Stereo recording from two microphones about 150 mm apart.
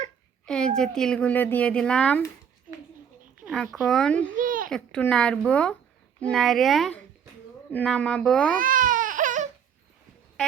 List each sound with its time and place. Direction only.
0.4 s speech: 5° left (ahead or behind)
3.5 s speech: centre (ahead or behind)
4.4 s a sound: 65° right (ahead or behind)
4.7 s a child's voice: 5° left (ahead or behind)
8.5 s baby cry: 65° right (ahead or behind)